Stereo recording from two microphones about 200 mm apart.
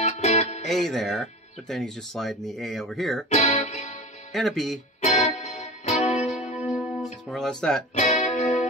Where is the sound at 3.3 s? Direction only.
35° left (ahead or behind).